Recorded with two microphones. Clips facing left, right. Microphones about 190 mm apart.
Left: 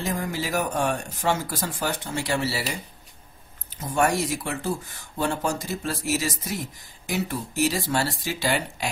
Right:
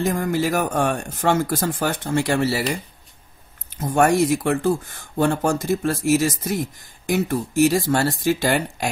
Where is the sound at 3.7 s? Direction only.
50° right (ahead or behind).